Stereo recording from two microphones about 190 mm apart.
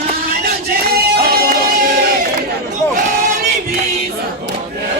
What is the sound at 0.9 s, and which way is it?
Music, 55° right (ahead or behind).